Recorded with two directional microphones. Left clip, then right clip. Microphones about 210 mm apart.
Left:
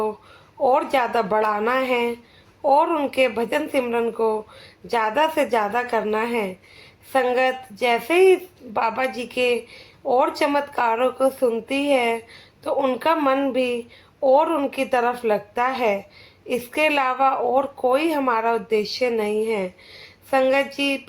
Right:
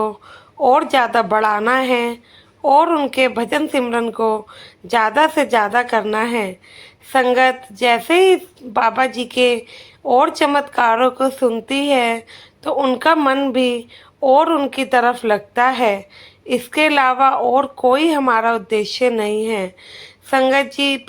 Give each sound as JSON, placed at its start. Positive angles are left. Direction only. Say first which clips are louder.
{"t": 0.6, "sound": "a woman's voice", "louder": "right 5 dB", "side_deg": -20}